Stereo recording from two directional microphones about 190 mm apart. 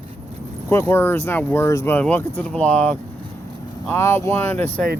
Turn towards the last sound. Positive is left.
turn(degrees=10)  # may be behind; listen again after turning